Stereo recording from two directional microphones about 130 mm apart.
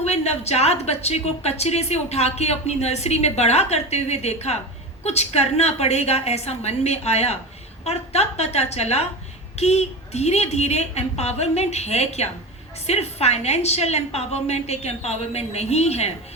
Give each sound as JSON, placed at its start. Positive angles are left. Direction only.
{"t": 0.0, "sound": "a woman's voice", "side_deg": 55}